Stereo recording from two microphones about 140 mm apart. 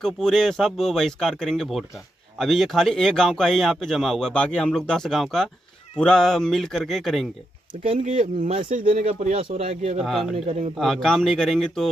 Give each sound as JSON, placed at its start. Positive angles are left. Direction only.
{"t": 0.0, "sound": "a man's voice", "side_deg": 5}
{"t": 7.7, "sound": "speech", "side_deg": -60}
{"t": 8.6, "sound": "speech", "side_deg": -70}
{"t": 8.9, "sound": "speech", "side_deg": -50}
{"t": 10.0, "sound": "a man's voice", "side_deg": 0}
{"t": 10.3, "sound": "speech", "side_deg": -50}
{"t": 10.8, "sound": "a man's voice", "side_deg": 5}